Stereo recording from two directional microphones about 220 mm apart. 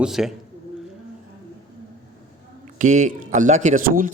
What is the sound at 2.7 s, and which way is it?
Speech, 35° right (ahead or behind).